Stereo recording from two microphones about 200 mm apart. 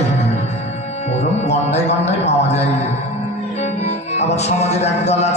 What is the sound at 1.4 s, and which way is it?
A man's voice, 35° left (ahead or behind).